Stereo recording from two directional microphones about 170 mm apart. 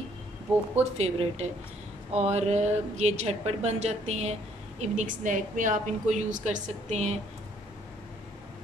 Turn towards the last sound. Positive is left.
turn(degrees=-40)  # may be behind; listen again after turning